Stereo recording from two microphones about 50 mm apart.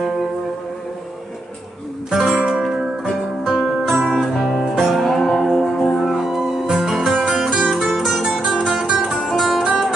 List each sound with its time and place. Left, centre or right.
2.1 s music: centre
7.2 s music: centre
7.9 s guitar: centre
8.2 s music: centre